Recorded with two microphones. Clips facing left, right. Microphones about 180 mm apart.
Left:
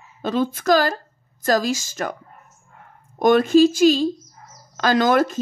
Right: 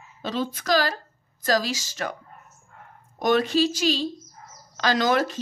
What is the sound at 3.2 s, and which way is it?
A woman's voice, 50° left (ahead or behind).